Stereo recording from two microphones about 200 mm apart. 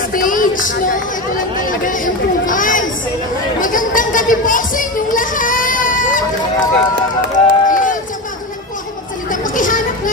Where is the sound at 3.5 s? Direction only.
40° left (ahead or behind).